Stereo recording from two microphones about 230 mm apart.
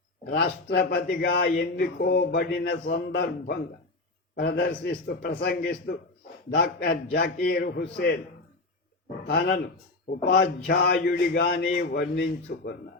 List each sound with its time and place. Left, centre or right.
0.3 s speech: left
9.2 s speech: left